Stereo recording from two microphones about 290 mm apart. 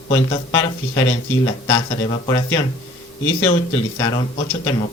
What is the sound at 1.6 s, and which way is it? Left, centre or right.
A man's voice, centre.